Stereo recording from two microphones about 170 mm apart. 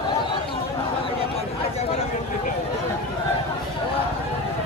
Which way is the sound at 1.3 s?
35° left (ahead or behind).